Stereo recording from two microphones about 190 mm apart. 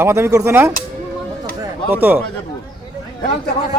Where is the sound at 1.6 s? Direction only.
10° right (ahead or behind).